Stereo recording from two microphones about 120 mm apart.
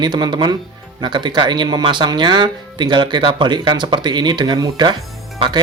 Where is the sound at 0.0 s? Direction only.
35° right (ahead or behind).